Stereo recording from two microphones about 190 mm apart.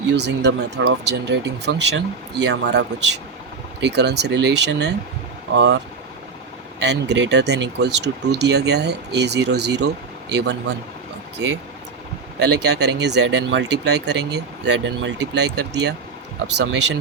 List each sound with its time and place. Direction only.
0.1 s speech: 65° right (ahead or behind)
6.8 s speech: 65° right (ahead or behind)
12.4 s speech: 65° right (ahead or behind)